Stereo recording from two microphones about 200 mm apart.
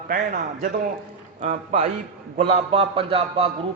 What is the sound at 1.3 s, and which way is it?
A man's voice, 30° right (ahead or behind).